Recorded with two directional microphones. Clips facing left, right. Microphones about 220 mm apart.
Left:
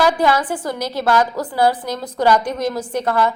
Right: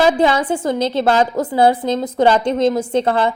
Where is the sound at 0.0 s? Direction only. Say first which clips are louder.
Right 2 dB; 25° right (ahead or behind).